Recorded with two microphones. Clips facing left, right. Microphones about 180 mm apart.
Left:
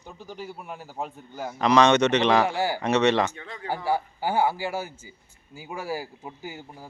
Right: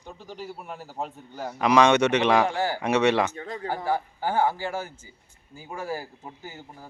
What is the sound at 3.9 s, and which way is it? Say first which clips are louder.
A man's voice: left 2 dB; 10° left (ahead or behind).